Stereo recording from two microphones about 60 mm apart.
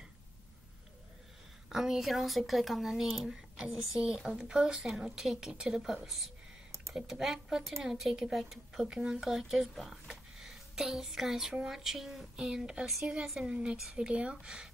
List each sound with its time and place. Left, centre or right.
1.7 s speech: centre
10.0 s a sound: centre
11.6 s speech: centre